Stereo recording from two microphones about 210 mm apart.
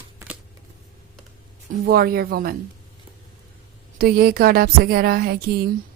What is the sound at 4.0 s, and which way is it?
A woman's voice, 45° right (ahead or behind).